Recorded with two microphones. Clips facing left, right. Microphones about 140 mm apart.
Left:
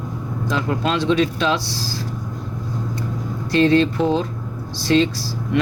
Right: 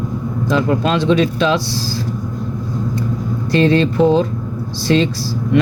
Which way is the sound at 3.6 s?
90° right.